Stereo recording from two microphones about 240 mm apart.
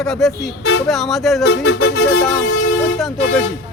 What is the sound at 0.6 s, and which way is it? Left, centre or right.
Speech, left.